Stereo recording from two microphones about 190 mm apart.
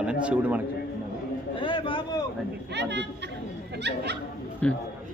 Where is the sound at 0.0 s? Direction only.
5° right (ahead or behind).